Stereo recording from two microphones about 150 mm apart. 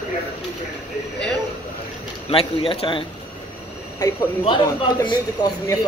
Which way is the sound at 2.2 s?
40° left (ahead or behind).